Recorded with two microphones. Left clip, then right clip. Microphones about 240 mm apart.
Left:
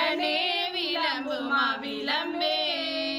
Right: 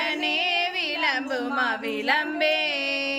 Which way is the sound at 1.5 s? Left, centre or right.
Centre.